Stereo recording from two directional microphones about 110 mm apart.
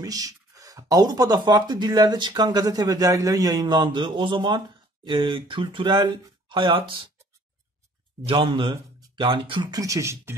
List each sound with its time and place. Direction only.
0.0 s speech: 30° right (ahead or behind); by 7.1 s 50° right (ahead or behind)
8.5 s speech: 45° right (ahead or behind); by 10.3 s 25° right (ahead or behind)